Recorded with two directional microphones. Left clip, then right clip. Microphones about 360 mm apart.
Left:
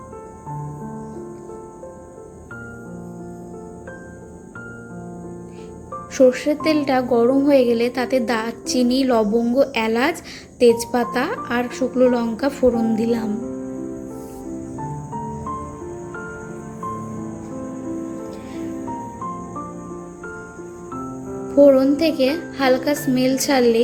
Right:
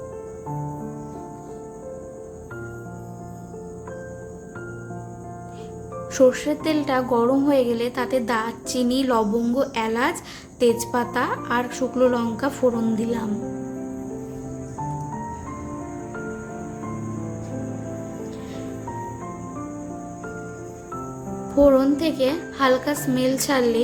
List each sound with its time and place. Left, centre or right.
6.1 s a woman's voice: centre
21.6 s a child's voice: centre